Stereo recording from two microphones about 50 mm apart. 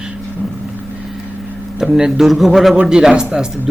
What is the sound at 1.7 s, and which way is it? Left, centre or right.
Speech, centre.